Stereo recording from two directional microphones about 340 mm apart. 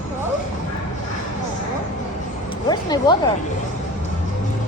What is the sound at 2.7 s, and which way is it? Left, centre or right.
Speech, centre.